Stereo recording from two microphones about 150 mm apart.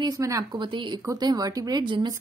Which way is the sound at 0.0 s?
20° right (ahead or behind).